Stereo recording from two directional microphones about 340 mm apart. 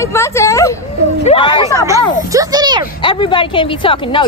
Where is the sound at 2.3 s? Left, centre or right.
Centre.